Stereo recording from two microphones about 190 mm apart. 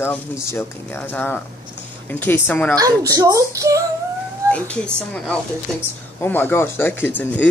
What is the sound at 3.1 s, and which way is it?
Speech, 20° right (ahead or behind).